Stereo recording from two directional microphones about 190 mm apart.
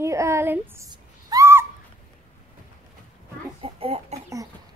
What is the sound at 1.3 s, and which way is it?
Owl, 15° right (ahead or behind).